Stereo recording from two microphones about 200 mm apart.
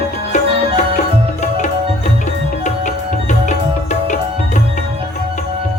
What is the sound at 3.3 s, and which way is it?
Music, 35° left (ahead or behind).